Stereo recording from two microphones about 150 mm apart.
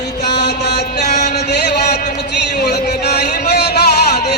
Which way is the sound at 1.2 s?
90° left.